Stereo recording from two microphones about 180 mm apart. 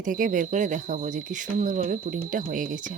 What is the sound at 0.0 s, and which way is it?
Speech, 45° right (ahead or behind).